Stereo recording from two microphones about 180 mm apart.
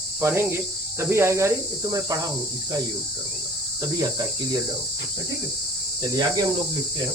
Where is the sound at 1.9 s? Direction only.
20° right (ahead or behind).